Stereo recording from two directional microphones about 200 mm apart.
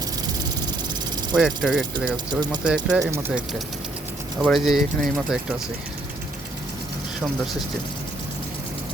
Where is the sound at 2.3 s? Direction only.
20° right (ahead or behind).